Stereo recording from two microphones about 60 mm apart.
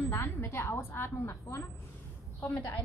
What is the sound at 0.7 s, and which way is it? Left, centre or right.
Speech, left.